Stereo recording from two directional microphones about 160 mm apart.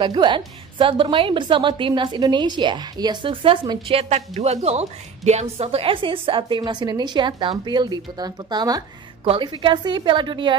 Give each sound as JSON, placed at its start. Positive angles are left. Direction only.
{"t": 0.0, "sound": "a woman's voice", "side_deg": -30}